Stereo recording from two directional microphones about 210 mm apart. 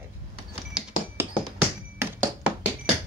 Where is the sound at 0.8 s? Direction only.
5° right (ahead or behind).